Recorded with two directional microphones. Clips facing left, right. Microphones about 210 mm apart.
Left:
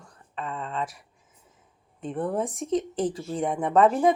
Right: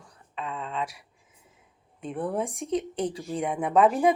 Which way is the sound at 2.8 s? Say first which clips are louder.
Left 2 dB; 30° left (ahead or behind).